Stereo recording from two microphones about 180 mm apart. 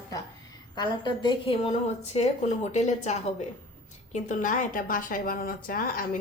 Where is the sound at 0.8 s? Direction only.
25° left (ahead or behind).